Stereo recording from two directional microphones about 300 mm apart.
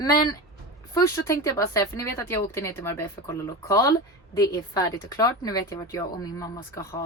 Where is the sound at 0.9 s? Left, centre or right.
Centre.